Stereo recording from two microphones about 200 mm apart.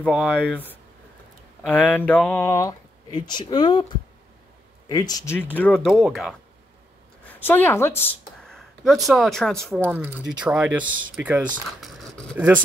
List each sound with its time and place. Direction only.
0.0 s speech: centre (ahead or behind); by 3.8 s 25° left (ahead or behind)
4.8 s a woman's voice: 20° left (ahead or behind); by 12.5 s 5° right (ahead or behind)